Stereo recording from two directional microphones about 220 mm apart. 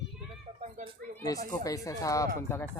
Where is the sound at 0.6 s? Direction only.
30° right (ahead or behind).